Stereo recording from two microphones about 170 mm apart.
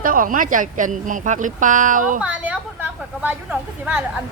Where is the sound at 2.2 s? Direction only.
5° right (ahead or behind).